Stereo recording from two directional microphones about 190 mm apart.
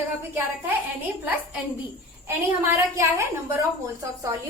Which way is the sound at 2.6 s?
15° right (ahead or behind).